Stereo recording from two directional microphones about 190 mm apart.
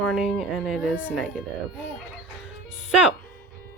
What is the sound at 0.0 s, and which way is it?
Speech, centre (ahead or behind).